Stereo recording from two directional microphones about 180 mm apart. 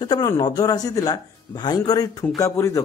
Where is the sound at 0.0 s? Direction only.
20° left (ahead or behind).